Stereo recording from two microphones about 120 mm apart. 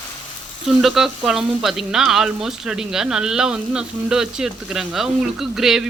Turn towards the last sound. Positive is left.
turn(degrees=-5)  # may be behind; listen again after turning